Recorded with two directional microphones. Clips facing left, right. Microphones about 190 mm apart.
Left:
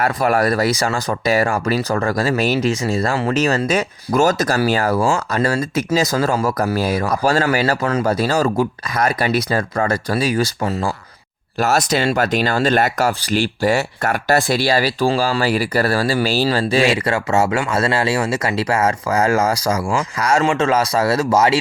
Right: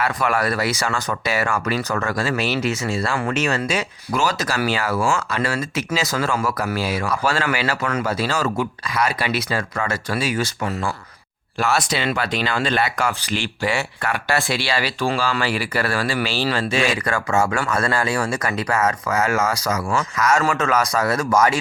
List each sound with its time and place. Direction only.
0.0 s speech: 40° left (ahead or behind)
7.9 s a man's voice: 30° left (ahead or behind)
8.2 s speech: 40° left (ahead or behind)
11.6 s a man's voice: 40° left (ahead or behind); by 21.6 s 25° left (ahead or behind)